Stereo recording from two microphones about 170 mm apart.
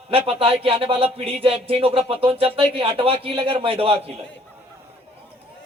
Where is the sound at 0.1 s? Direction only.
35° right (ahead or behind).